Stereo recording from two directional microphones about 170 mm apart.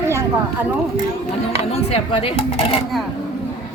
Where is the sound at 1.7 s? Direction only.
35° left (ahead or behind).